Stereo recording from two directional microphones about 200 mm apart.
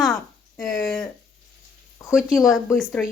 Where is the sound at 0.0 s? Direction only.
Centre (ahead or behind).